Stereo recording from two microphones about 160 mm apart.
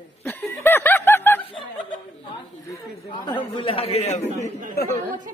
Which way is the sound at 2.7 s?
25° left (ahead or behind).